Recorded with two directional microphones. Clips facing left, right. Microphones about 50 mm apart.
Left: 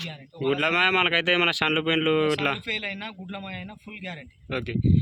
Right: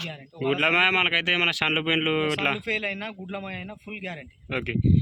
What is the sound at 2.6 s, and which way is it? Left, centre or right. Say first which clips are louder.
A man's voice: right 3 dB; right.